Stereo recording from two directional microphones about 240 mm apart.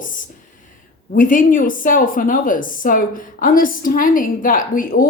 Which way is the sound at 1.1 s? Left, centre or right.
Left.